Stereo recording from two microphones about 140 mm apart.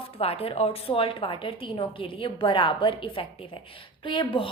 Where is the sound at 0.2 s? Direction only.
45° left (ahead or behind).